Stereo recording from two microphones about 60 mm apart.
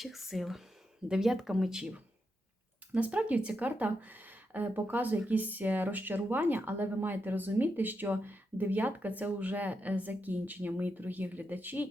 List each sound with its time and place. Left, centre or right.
0.0 s speech: centre
2.9 s speech: right